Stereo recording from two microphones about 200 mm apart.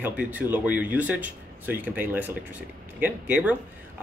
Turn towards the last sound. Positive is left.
turn(degrees=-10)  # may be behind; listen again after turning